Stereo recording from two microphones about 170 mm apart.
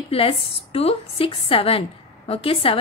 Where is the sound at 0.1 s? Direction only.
35° left (ahead or behind).